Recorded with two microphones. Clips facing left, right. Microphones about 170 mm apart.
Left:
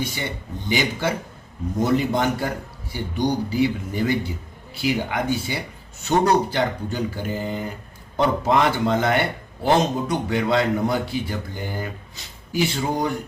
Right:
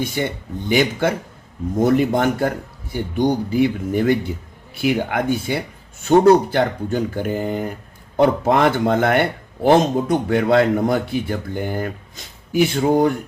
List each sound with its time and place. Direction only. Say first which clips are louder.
0.0 s a man's voice: right 5 dB; 50° right (ahead or behind)